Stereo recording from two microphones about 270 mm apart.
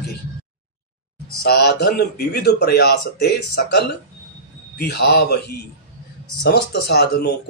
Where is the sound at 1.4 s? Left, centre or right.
Left.